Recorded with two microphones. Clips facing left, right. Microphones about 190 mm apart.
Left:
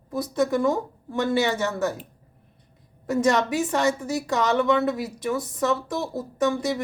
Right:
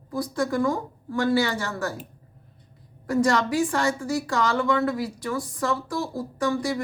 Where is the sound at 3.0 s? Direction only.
20° left (ahead or behind).